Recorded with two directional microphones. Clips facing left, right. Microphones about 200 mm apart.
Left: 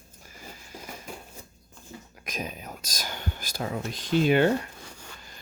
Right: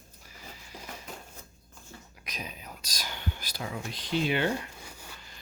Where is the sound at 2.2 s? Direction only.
50° left (ahead or behind).